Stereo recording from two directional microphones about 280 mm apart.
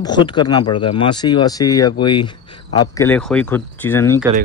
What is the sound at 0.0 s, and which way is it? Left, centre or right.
Speech, centre.